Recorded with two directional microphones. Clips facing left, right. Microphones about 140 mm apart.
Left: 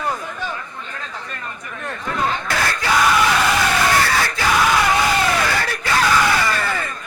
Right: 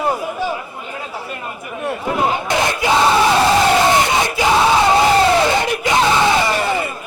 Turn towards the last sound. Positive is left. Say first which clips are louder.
# right 4 dB
turn(degrees=-20)  # may be behind; listen again after turning